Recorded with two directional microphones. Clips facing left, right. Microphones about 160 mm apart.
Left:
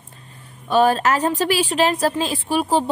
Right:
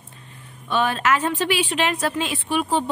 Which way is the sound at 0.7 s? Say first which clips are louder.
Left 5 dB; 40° left (ahead or behind).